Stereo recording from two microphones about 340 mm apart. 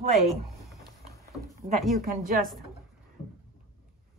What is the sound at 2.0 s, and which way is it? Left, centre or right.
Speech, right.